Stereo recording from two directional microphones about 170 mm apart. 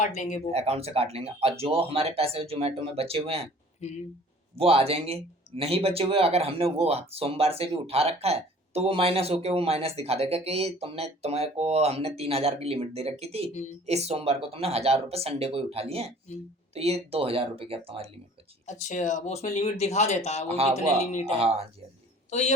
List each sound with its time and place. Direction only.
0.0 s speech: 45° left (ahead or behind)
0.5 s speech: 35° right (ahead or behind)
4.5 s speech: 35° right (ahead or behind)
18.6 s speech: 45° left (ahead or behind)
21.2 s speech: 40° right (ahead or behind)
22.3 s a man's voice: 45° left (ahead or behind)